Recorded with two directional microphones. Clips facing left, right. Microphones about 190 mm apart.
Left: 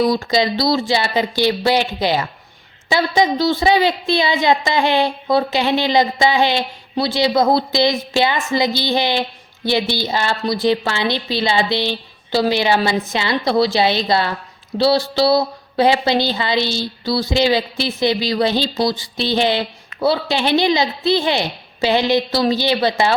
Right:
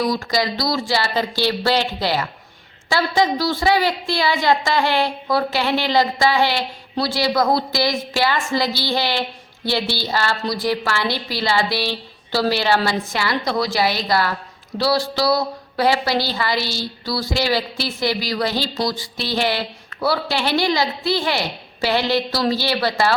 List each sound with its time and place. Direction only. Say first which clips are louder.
0.0 s speech: left 4 dB; 25° left (ahead or behind)